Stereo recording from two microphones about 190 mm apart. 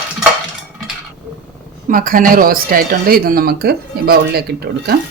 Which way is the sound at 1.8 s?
45° right (ahead or behind).